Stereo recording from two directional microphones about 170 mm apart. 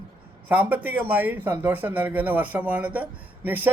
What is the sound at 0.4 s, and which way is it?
A man's voice, 10° right (ahead or behind).